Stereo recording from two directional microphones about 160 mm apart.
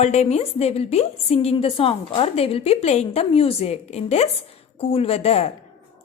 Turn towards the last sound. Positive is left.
turn(degrees=40)  # may be behind; listen again after turning